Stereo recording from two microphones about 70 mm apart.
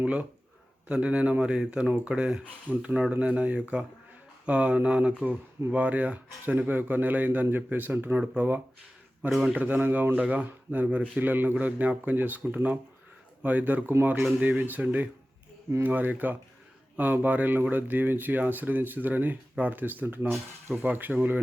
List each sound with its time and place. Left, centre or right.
0.0 s speech: centre